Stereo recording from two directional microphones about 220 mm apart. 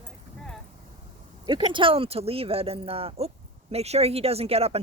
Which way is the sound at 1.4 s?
20° right (ahead or behind).